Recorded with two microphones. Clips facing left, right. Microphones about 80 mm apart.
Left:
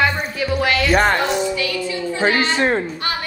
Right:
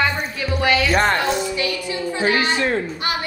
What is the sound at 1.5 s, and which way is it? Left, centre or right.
Speech, right.